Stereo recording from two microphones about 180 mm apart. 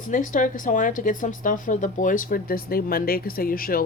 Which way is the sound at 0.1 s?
45° left (ahead or behind).